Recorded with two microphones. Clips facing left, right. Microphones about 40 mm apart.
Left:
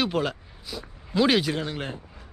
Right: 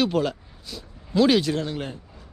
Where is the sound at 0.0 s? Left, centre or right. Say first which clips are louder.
Right 3 dB; centre.